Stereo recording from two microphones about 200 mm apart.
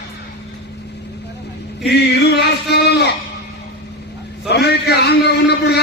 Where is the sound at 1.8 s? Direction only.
55° left (ahead or behind).